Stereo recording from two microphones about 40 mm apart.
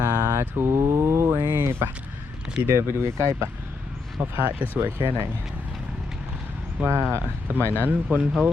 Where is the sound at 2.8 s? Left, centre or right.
Right.